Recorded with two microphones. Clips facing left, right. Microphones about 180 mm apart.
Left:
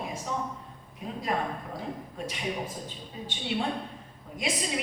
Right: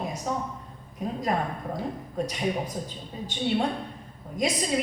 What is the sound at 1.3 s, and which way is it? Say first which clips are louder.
A woman's voice: even; 40° right (ahead or behind).